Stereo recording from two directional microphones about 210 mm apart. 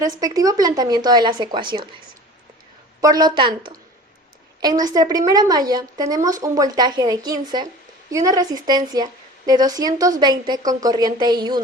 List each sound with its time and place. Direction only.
0.0 s a woman's voice: 15° right (ahead or behind)
3.0 s a woman's voice: 20° right (ahead or behind)